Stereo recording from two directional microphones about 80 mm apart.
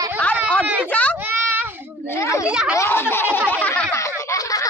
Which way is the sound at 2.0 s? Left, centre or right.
Left.